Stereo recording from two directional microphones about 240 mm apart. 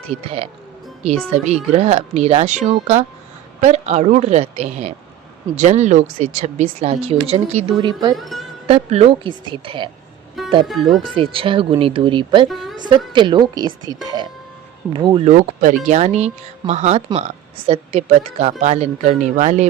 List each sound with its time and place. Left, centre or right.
0.1 s speech: right
8.1 s speech: centre
8.6 s speech: right
10.7 s speech: centre
11.2 s speech: right
12.5 s speech: centre
13.1 s a woman's voice: centre